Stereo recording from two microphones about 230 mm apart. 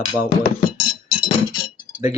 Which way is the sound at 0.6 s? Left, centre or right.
Left.